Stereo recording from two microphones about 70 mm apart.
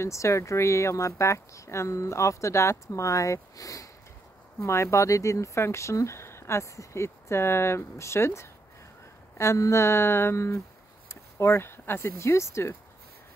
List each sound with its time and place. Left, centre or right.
0.0 s speech: left